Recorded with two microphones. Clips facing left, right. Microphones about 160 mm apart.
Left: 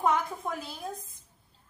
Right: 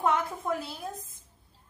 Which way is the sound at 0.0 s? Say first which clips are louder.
Even; centre (ahead or behind).